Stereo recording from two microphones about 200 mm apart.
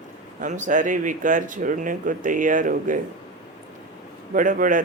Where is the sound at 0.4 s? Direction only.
40° right (ahead or behind).